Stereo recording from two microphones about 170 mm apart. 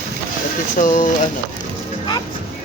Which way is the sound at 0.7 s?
50° left (ahead or behind).